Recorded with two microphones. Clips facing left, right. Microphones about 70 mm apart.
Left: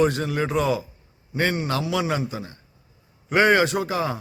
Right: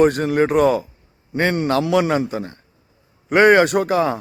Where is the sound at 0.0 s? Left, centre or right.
Right.